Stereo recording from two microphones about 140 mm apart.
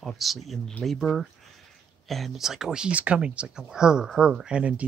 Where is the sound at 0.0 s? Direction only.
Centre (ahead or behind).